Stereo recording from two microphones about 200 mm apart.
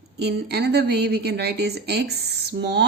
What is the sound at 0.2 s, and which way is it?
Speech, 55° right (ahead or behind).